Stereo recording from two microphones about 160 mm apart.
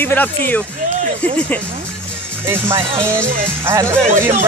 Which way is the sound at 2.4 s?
15° right (ahead or behind).